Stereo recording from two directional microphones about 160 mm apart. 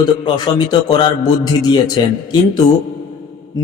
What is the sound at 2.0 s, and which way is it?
Speech, 25° left (ahead or behind).